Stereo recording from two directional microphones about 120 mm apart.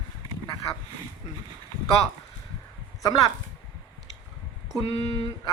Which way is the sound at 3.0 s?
30° left (ahead or behind).